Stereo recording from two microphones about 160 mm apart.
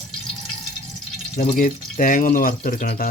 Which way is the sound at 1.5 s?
60° left (ahead or behind).